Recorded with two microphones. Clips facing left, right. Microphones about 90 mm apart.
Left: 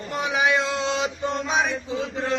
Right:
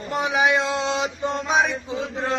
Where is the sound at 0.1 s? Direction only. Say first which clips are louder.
Right 2 dB; 20° right (ahead or behind).